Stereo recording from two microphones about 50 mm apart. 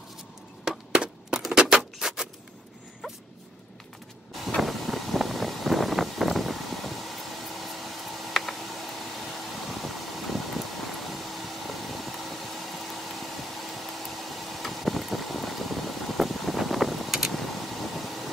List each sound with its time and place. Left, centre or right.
0.7 s chop: centre
1.4 s a sound: centre
4.6 s vehicle: centre